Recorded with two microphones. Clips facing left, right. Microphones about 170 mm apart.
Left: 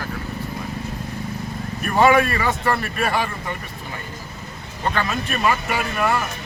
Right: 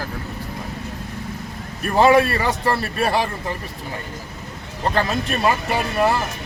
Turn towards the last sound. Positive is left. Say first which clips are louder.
# right 2 dB
turn(degrees=-30)  # may be behind; listen again after turning